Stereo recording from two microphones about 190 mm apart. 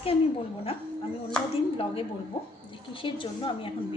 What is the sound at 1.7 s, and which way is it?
A woman's voice, 30° left (ahead or behind).